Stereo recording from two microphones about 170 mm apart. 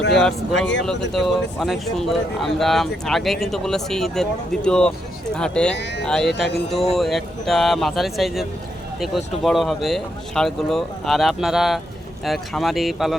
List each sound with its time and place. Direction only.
0.1 s speech: centre (ahead or behind)
5.7 s speech: 90° left
6.1 s speech: 5° left (ahead or behind)